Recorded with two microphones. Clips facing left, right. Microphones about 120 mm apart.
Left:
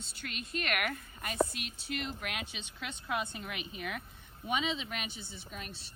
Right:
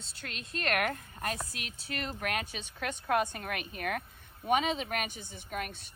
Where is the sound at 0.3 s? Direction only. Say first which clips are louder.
Right 2 dB; 35° right (ahead or behind).